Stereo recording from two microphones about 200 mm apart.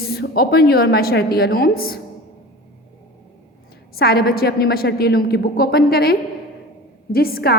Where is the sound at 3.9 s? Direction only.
50° left (ahead or behind).